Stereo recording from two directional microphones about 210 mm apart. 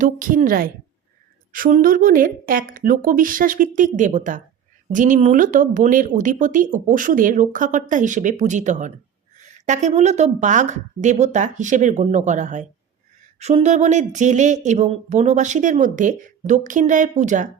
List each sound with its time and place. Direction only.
0.0 s speech: 40° right (ahead or behind)